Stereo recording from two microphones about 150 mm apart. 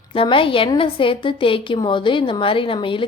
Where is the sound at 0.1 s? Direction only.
35° left (ahead or behind).